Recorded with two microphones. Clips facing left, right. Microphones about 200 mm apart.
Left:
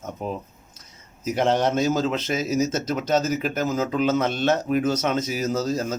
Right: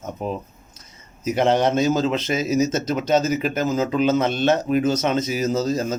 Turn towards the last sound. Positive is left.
turn(degrees=5)  # may be behind; listen again after turning